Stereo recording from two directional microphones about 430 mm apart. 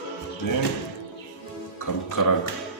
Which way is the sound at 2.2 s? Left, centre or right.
Left.